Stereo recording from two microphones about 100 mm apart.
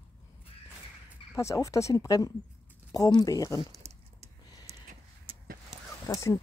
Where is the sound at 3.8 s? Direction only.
90° right.